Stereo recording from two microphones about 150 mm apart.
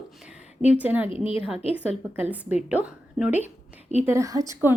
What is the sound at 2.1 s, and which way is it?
A woman's voice, 10° right (ahead or behind).